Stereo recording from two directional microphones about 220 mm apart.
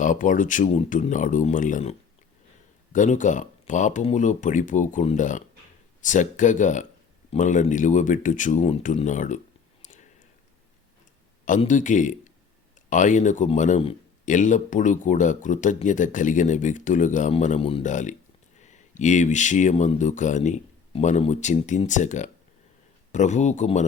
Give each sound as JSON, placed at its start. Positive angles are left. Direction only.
{"t": 0.0, "sound": "speech", "side_deg": 35}
{"t": 11.4, "sound": "speech", "side_deg": 35}